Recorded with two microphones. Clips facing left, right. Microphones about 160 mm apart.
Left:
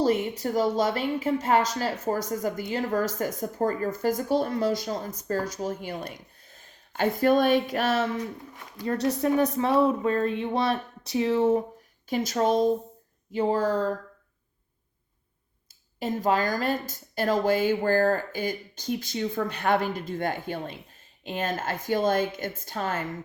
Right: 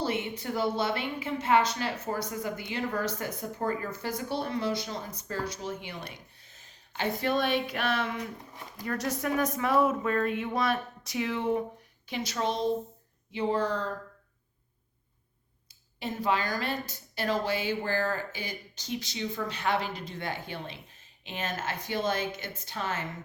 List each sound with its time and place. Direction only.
0.0 s a woman's voice: 40° left (ahead or behind)
16.0 s speech: 45° left (ahead or behind)